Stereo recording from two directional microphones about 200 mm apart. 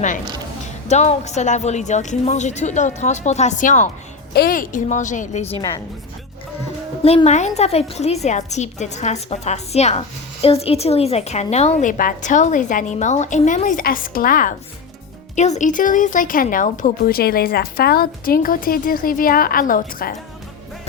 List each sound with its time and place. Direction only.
0.9 s a woman's voice: 35° left (ahead or behind)
7.0 s a woman's voice: 30° left (ahead or behind)